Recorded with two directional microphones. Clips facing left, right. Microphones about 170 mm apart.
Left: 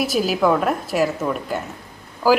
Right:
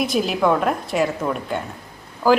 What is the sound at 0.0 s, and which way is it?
A woman's voice, 5° left (ahead or behind).